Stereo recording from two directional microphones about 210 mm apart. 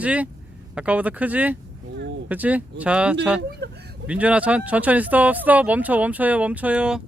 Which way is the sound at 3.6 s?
50° right (ahead or behind).